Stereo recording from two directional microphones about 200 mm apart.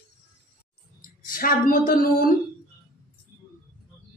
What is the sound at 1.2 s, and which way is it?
Speech, 45° left (ahead or behind).